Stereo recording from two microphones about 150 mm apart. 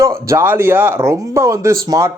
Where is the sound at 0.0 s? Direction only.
20° right (ahead or behind).